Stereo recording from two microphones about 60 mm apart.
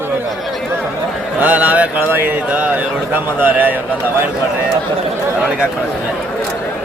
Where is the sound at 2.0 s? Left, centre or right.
Right.